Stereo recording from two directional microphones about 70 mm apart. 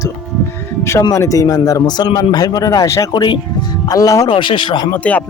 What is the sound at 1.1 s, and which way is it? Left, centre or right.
Speech, left.